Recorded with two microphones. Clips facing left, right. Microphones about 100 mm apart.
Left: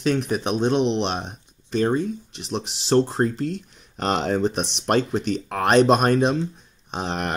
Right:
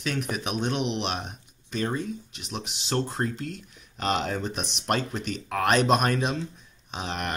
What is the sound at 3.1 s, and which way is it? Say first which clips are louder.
Speech: left 7 dB; 35° left (ahead or behind).